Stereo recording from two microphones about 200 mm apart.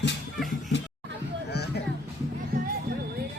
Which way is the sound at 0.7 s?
65° left (ahead or behind).